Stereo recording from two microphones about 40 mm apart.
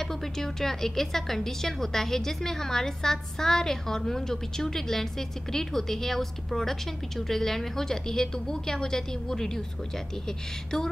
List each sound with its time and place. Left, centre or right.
0.0 s a woman's voice: centre